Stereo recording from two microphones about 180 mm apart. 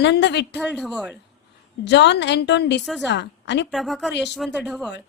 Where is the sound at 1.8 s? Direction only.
75° left (ahead or behind).